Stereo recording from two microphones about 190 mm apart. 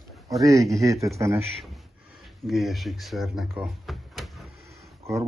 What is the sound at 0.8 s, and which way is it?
Speech, 15° right (ahead or behind).